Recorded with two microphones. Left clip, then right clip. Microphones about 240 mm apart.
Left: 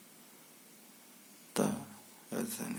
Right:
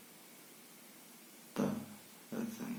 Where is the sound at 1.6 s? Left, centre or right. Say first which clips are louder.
Left 5 dB; left.